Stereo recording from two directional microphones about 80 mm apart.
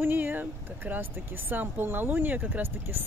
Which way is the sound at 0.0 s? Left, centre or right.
Right.